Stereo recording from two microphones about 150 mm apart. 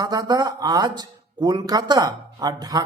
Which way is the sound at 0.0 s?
25° right (ahead or behind).